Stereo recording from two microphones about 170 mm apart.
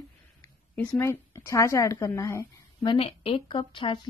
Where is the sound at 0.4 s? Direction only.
15° left (ahead or behind).